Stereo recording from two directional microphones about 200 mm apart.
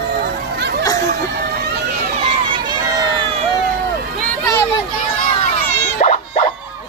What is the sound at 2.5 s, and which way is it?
Crowd, 20° right (ahead or behind).